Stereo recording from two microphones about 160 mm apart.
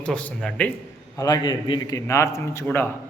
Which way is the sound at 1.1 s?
25° left (ahead or behind).